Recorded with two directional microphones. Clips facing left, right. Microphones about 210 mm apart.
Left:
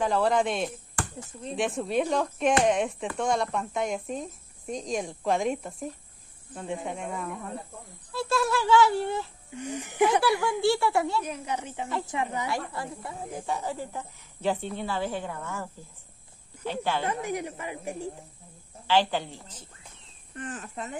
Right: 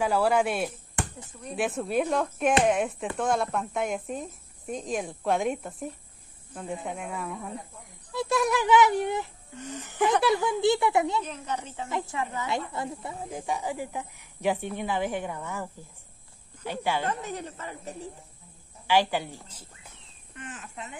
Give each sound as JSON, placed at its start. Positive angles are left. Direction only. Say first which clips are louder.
{"t": 0.0, "sound": "speech", "louder": "right 1 dB", "side_deg": -10}
{"t": 1.0, "sound": "a sound", "louder": "right 2 dB", "side_deg": -20}
{"t": 1.6, "sound": "speech", "louder": "even", "side_deg": -5}
{"t": 8.1, "sound": "speech", "louder": "right 1 dB", "side_deg": -20}
{"t": 9.5, "sound": "speech", "louder": "left 4 dB", "side_deg": 15}
{"t": 10.2, "sound": "a child's voice", "louder": "right 1 dB", "side_deg": -20}
{"t": 11.2, "sound": "speech", "louder": "left 1 dB", "side_deg": 10}
{"t": 12.4, "sound": "speech", "louder": "right 1 dB", "side_deg": -20}
{"t": 17.0, "sound": "speech", "louder": "left 2 dB", "side_deg": 10}
{"t": 18.9, "sound": "speech", "louder": "even", "side_deg": -10}
{"t": 20.3, "sound": "speech", "louder": "left 5 dB", "side_deg": 35}